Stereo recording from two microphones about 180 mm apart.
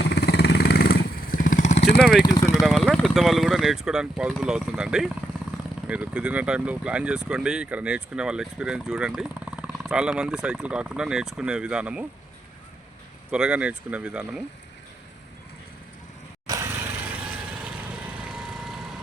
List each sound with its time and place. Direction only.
0.0 s motorcycle: 65° left (ahead or behind); by 1.8 s 45° left (ahead or behind)
2.0 s speech: 5° right (ahead or behind)
2.2 s speech: 20° left (ahead or behind)
2.6 s speech: centre (ahead or behind)
13.3 s speech: 5° right (ahead or behind)
16.5 s lawn mower: 15° right (ahead or behind)
17.6 s lawn mower: 5° right (ahead or behind)